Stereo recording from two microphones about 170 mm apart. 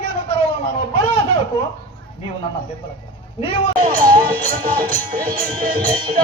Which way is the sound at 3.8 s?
55° right (ahead or behind).